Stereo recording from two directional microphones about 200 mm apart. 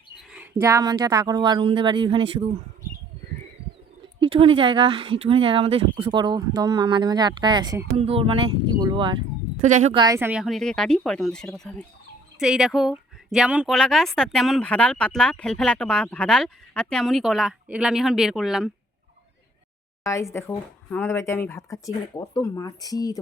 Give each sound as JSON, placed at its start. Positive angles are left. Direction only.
{"t": 0.2, "sound": "a sound", "side_deg": 0}
{"t": 0.6, "sound": "speech", "side_deg": -15}
{"t": 4.2, "sound": "speech", "side_deg": -25}
{"t": 7.9, "sound": "speech", "side_deg": -30}
{"t": 9.6, "sound": "speech", "side_deg": -40}
{"t": 9.9, "sound": "speech", "side_deg": -20}
{"t": 10.2, "sound": "a woman's voice", "side_deg": -10}
{"t": 20.1, "sound": "speech", "side_deg": 15}